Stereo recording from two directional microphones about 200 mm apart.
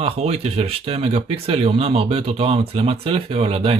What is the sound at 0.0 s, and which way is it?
Speech, 30° right (ahead or behind).